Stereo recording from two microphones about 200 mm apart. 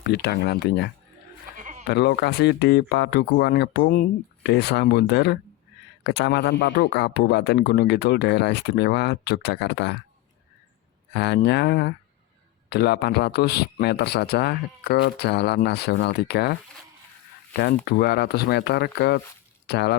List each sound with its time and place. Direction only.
0.1 s a man's voice: 55° left (ahead or behind)
1.5 s bleat: 40° right (ahead or behind)
1.9 s a man's voice: 55° left (ahead or behind)
11.1 s a man's voice: 55° left (ahead or behind)
17.8 s a man's voice: 55° left (ahead or behind)